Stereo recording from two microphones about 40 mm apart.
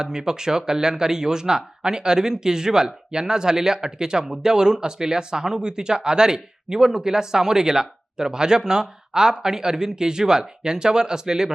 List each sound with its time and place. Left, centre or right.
0.0 s speech: centre